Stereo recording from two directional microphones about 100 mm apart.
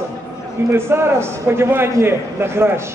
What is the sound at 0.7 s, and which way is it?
A man's voice, 25° right (ahead or behind).